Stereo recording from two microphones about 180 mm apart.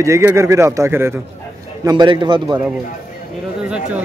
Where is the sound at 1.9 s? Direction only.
25° right (ahead or behind).